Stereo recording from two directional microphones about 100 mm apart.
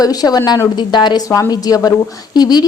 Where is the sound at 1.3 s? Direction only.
35° left (ahead or behind).